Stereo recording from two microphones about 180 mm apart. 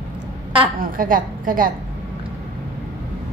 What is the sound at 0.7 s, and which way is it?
Speech, 50° right (ahead or behind).